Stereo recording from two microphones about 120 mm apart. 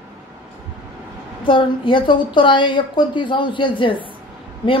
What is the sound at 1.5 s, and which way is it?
A woman's voice, 45° left (ahead or behind).